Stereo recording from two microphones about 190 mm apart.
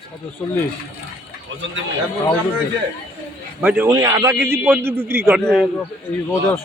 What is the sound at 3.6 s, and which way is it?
Speech, 10° right (ahead or behind).